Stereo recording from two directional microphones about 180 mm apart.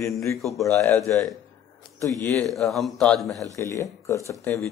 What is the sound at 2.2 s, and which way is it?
Speech, 15° left (ahead or behind).